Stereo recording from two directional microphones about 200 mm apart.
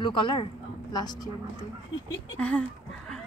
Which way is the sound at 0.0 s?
25° left (ahead or behind).